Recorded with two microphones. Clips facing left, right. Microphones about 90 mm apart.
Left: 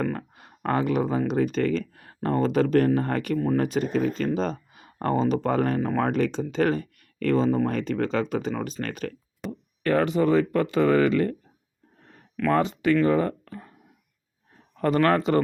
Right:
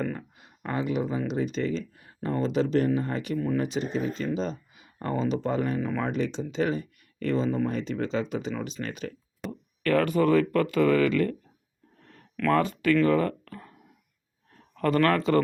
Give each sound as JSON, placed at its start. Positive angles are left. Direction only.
{"t": 0.0, "sound": "speech", "side_deg": 55}
{"t": 9.4, "sound": "a sound", "side_deg": 0}
{"t": 9.8, "sound": "speech", "side_deg": 25}
{"t": 12.5, "sound": "speech", "side_deg": 25}
{"t": 14.8, "sound": "speech", "side_deg": 25}